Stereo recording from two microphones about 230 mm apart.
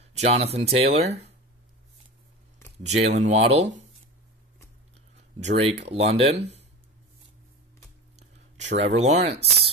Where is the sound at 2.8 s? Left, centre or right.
Right.